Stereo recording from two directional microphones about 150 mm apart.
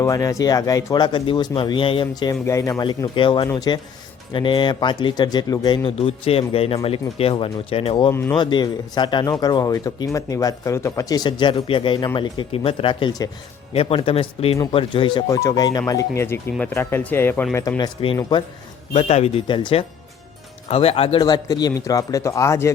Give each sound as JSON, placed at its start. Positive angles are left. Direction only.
{"t": 0.0, "sound": "speech", "side_deg": 25}
{"t": 3.2, "sound": "speech", "side_deg": 35}
{"t": 3.4, "sound": "speech", "side_deg": 25}
{"t": 8.1, "sound": "speech", "side_deg": 15}
{"t": 8.4, "sound": "speech", "side_deg": 30}
{"t": 13.7, "sound": "speech", "side_deg": 40}
{"t": 18.9, "sound": "speech", "side_deg": 45}